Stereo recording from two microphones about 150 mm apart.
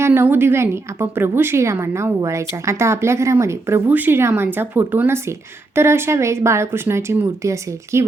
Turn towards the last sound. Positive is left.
turn(degrees=-20)  # may be behind; listen again after turning